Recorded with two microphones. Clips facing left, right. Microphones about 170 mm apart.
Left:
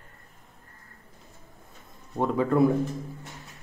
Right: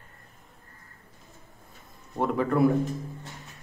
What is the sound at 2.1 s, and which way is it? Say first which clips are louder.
Speech: left 2 dB; 15° left (ahead or behind).